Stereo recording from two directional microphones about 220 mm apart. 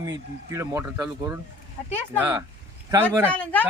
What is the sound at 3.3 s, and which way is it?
Speech, 5° left (ahead or behind).